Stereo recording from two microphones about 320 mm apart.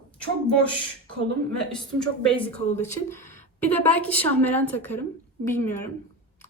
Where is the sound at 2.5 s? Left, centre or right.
Left.